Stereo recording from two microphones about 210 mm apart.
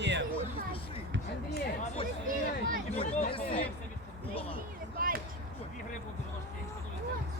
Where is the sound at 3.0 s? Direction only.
30° left (ahead or behind).